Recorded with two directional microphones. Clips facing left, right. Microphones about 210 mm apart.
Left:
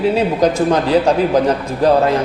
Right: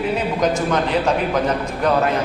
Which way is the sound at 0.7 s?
35° left (ahead or behind).